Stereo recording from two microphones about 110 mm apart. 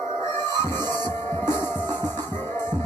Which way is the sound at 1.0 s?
25° left (ahead or behind).